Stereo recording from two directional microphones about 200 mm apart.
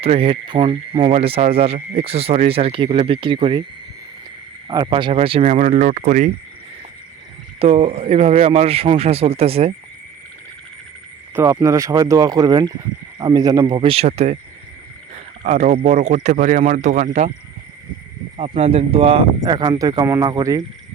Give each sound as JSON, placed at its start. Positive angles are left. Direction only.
{"t": 0.0, "sound": "speech", "side_deg": -30}
{"t": 4.7, "sound": "speech", "side_deg": -20}
{"t": 7.6, "sound": "speech", "side_deg": -30}
{"t": 11.3, "sound": "speech", "side_deg": -15}
{"t": 15.4, "sound": "speech", "side_deg": -35}
{"t": 18.3, "sound": "speech", "side_deg": -30}